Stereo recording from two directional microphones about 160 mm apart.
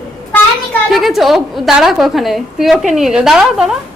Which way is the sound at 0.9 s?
Centre (ahead or behind).